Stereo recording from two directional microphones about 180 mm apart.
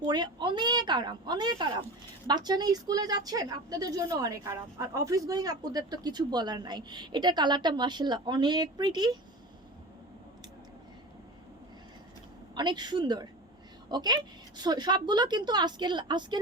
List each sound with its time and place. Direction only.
0.0 s speech: 25° right (ahead or behind)
12.5 s speech: 25° right (ahead or behind)